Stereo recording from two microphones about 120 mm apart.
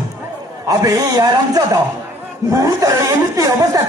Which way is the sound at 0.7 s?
30° right (ahead or behind).